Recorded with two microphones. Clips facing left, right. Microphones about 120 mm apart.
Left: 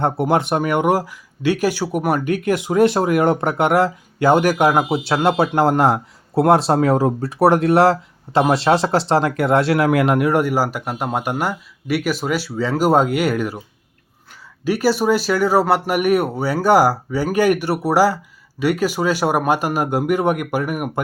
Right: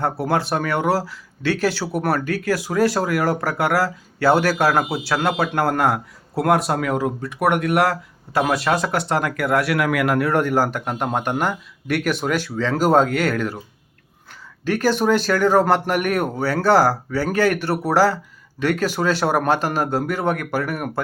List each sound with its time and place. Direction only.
0.0 s speech: 20° left (ahead or behind)
14.6 s speech: 10° left (ahead or behind)